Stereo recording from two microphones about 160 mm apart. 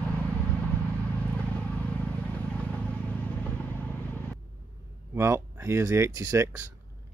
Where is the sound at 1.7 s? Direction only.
10° left (ahead or behind).